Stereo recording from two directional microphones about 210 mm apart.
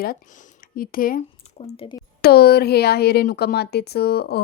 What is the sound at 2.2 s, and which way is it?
Speech, 50° left (ahead or behind).